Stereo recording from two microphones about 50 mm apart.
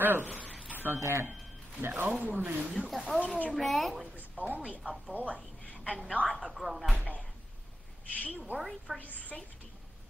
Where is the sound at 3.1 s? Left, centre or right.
Left.